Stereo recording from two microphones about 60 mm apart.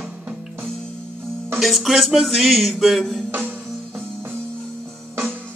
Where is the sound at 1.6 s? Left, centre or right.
Centre.